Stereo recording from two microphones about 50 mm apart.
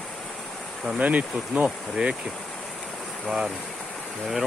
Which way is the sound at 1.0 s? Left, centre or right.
Right.